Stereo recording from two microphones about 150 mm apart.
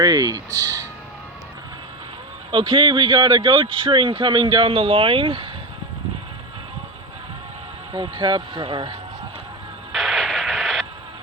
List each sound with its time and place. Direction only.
0.0 s speech: 25° right (ahead or behind)
2.5 s speech: 35° right (ahead or behind)
7.9 s speech: 30° right (ahead or behind)
9.9 s radio: centre (ahead or behind)